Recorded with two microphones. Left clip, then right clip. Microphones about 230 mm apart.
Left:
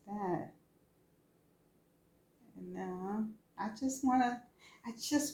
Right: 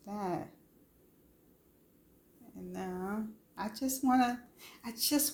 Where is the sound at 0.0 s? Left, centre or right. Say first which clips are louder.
Right 1 dB; right.